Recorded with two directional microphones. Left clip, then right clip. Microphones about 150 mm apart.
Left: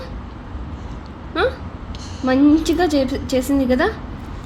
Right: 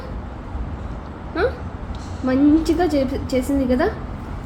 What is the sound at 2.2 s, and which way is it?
A woman's voice, 30° left (ahead or behind).